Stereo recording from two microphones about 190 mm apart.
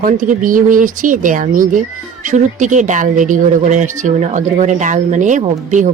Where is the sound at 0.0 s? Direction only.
45° right (ahead or behind).